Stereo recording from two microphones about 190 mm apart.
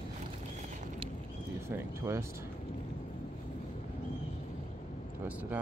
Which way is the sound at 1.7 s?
15° right (ahead or behind).